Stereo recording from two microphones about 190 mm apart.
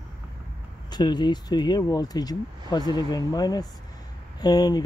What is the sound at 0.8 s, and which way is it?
Speech, 20° left (ahead or behind).